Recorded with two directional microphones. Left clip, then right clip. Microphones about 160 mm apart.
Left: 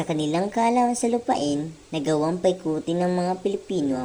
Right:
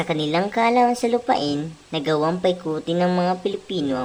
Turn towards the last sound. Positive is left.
turn(degrees=20)  # may be behind; listen again after turning